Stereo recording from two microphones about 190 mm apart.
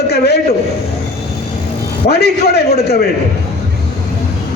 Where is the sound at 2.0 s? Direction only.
60° left (ahead or behind).